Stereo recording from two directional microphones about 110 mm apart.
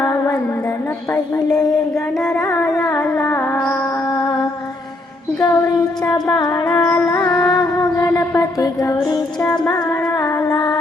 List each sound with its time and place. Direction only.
0.0 s carnatic music: 30° left (ahead or behind)
2.1 s music: 10° left (ahead or behind)
2.4 s music: 30° left (ahead or behind)
5.4 s a sound: 35° left (ahead or behind)
6.7 s music: 40° left (ahead or behind)